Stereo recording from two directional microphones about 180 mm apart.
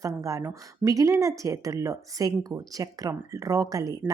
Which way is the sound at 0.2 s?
20° right (ahead or behind).